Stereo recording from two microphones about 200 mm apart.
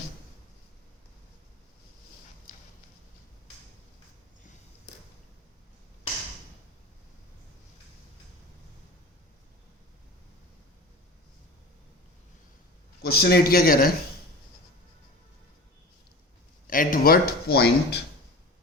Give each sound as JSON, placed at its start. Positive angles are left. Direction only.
{"t": 13.0, "sound": "speech", "side_deg": 50}
{"t": 16.6, "sound": "speech", "side_deg": 45}